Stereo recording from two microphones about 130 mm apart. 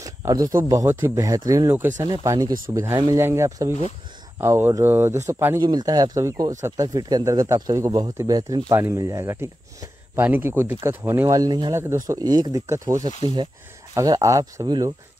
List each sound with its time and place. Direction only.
0.0 s a sound: 25° right (ahead or behind)
0.7 s speech: 20° right (ahead or behind)
2.2 s speech: 25° right (ahead or behind)
5.6 s speech: 30° right (ahead or behind)
13.2 s speech: 35° right (ahead or behind)